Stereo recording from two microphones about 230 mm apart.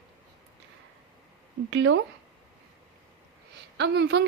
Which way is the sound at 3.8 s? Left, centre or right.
Right.